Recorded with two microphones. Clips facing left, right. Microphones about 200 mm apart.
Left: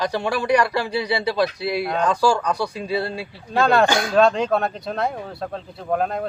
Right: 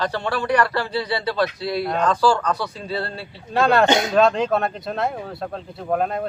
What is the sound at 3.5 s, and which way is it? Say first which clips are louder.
Speech: even; centre (ahead or behind).